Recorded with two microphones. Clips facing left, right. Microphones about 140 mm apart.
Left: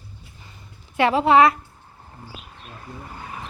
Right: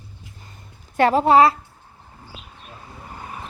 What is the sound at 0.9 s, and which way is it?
Speech, 45° right (ahead or behind).